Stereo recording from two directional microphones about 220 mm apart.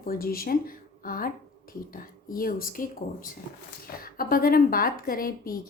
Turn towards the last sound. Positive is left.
turn(degrees=40)  # may be behind; listen again after turning